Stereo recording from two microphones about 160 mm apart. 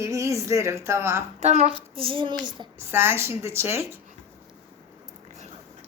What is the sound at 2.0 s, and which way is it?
Speech, 35° right (ahead or behind).